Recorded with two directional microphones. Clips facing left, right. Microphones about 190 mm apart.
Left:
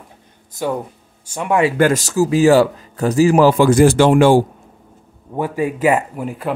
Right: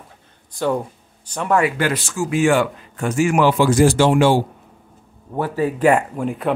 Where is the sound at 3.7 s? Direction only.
60° left (ahead or behind).